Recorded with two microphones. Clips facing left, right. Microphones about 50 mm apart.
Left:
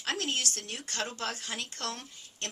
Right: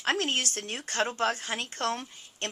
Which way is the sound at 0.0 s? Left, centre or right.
Right.